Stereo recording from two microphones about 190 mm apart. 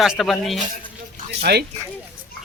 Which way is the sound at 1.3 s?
60° right (ahead or behind).